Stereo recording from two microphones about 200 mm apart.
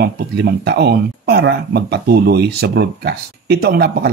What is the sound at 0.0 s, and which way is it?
Speech, 55° right (ahead or behind).